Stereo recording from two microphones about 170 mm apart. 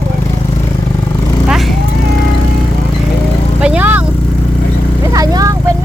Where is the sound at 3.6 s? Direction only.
10° right (ahead or behind).